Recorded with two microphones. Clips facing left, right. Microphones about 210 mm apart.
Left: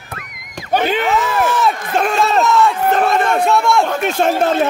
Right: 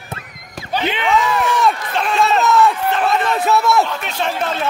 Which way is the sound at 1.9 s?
45° left (ahead or behind).